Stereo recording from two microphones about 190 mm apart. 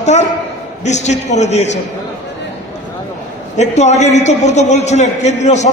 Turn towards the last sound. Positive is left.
turn(degrees=35)  # may be behind; listen again after turning